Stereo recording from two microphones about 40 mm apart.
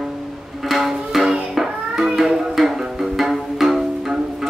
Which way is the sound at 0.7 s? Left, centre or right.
Centre.